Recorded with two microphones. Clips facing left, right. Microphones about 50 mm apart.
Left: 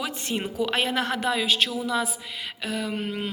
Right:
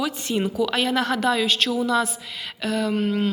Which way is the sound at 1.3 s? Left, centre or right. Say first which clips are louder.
Right 3 dB; centre.